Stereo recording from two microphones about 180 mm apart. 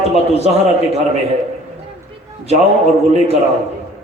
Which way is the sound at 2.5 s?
35° right (ahead or behind).